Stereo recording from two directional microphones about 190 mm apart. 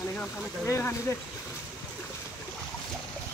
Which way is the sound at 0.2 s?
10° left (ahead or behind).